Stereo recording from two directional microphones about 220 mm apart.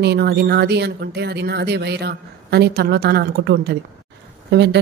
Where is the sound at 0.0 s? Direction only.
45° right (ahead or behind).